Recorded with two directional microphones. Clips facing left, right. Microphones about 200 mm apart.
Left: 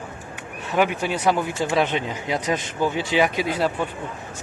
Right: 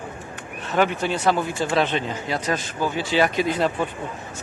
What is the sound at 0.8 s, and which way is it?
Speech, 10° left (ahead or behind).